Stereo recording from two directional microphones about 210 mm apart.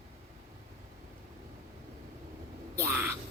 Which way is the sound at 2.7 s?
10° right (ahead or behind).